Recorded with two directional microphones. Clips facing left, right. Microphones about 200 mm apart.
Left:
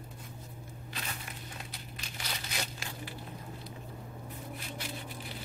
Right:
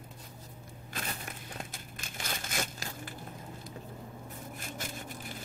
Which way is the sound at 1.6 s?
50° right (ahead or behind).